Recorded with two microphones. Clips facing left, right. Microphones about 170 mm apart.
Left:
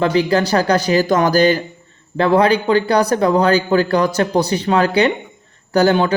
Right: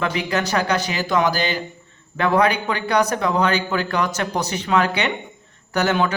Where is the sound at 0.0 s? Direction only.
35° left (ahead or behind).